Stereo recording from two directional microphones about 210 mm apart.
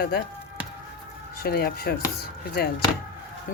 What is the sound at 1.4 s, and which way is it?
Speech, 45° left (ahead or behind).